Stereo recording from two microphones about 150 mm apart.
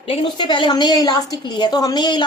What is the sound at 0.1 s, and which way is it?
A woman's voice, 35° left (ahead or behind).